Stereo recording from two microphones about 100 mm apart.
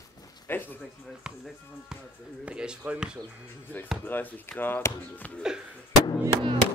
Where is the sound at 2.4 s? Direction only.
10° right (ahead or behind).